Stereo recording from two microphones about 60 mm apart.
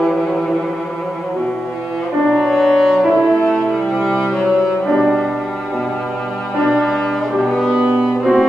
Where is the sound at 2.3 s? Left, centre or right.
Centre.